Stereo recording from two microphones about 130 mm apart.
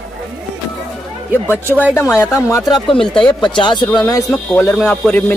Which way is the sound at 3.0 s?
5° left (ahead or behind).